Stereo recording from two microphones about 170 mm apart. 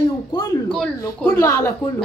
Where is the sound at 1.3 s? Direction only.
15° left (ahead or behind).